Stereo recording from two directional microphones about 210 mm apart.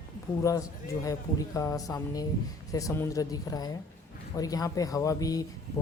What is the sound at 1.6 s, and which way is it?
A woman's voice, 15° left (ahead or behind).